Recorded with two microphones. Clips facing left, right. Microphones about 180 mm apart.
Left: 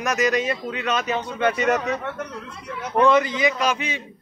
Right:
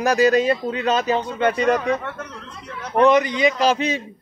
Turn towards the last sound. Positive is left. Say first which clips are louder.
# right 5 dB
turn(degrees=-35)  # may be behind; listen again after turning